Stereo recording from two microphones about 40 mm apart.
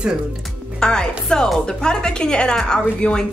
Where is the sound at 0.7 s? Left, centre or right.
Centre.